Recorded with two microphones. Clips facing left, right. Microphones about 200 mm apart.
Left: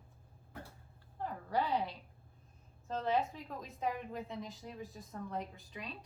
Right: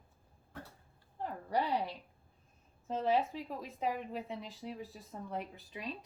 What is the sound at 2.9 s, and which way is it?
A woman's voice, 10° right (ahead or behind).